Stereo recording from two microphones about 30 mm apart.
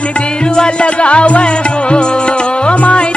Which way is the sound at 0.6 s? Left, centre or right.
Left.